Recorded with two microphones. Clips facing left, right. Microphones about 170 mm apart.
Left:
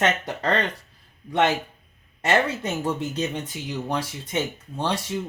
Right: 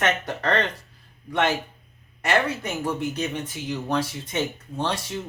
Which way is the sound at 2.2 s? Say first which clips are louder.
Left 1 dB; 25° left (ahead or behind).